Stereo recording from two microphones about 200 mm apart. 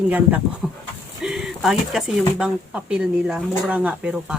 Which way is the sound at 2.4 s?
5° right (ahead or behind).